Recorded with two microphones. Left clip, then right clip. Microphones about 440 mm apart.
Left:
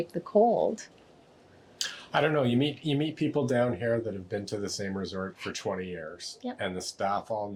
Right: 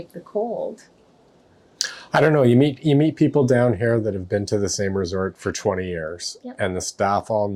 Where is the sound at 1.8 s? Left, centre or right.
Right.